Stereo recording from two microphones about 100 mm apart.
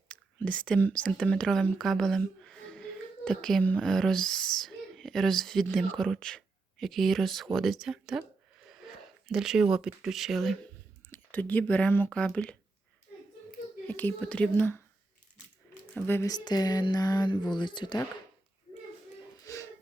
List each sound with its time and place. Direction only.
0.1 s speech: 15° left (ahead or behind); by 8.2 s 5° right (ahead or behind)
9.2 s speech: 5° right (ahead or behind)
11.1 s speech: 15° left (ahead or behind)
13.8 s speech: 15° left (ahead or behind)
16.0 s speech: 20° left (ahead or behind)
16.2 s speech: 45° left (ahead or behind)